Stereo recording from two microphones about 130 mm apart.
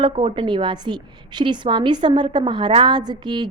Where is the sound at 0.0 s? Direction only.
40° right (ahead or behind).